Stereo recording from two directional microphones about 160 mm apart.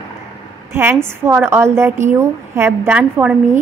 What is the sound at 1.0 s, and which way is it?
A woman's voice, 15° right (ahead or behind).